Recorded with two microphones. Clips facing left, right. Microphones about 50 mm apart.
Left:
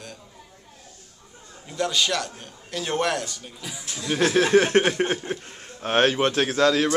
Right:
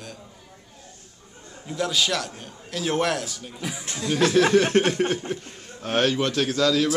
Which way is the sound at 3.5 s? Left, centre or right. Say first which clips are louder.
Right 7 dB; right.